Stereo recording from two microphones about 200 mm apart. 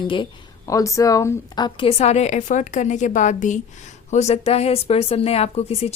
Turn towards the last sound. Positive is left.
turn(degrees=30)  # may be behind; listen again after turning